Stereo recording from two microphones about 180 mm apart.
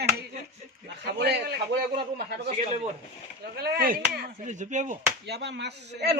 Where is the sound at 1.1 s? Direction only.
65° right (ahead or behind).